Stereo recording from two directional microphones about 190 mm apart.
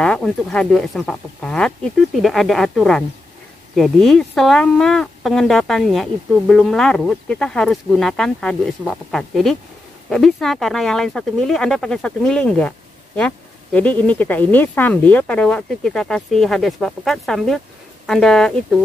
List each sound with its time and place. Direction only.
0.0 s speech: 5° left (ahead or behind)